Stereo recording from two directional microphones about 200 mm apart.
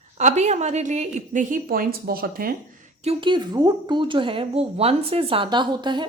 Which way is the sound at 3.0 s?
25° right (ahead or behind).